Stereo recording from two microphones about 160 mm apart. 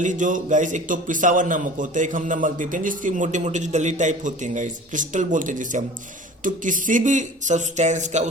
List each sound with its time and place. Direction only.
0.0 s a man's voice: 50° right (ahead or behind)